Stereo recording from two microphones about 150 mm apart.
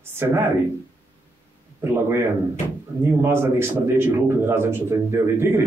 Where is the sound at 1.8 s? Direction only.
15° right (ahead or behind).